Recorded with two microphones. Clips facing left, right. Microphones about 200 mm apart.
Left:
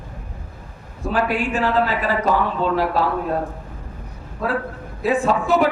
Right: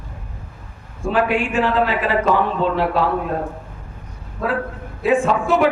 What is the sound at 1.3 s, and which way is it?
A man's voice, 40° left (ahead or behind).